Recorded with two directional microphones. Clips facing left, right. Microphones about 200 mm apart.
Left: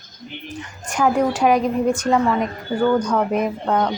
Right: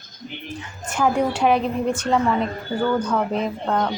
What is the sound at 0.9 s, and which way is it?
Speech, 5° left (ahead or behind).